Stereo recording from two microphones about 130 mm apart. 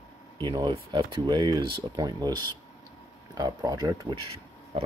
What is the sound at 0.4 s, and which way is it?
Speech, 35° right (ahead or behind).